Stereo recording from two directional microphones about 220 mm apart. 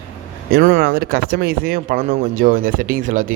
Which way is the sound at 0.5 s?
40° right (ahead or behind).